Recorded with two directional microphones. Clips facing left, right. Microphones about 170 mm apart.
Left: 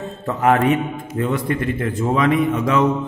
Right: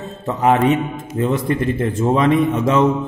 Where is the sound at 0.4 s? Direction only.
20° right (ahead or behind).